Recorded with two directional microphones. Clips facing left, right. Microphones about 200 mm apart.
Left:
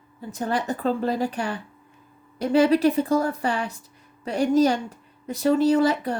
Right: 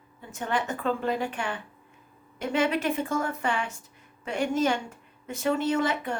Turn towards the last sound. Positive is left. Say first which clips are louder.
# left 7 dB
turn(degrees=35)  # may be behind; listen again after turning